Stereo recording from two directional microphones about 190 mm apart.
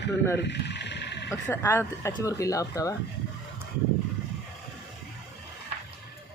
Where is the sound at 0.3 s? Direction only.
65° left (ahead or behind).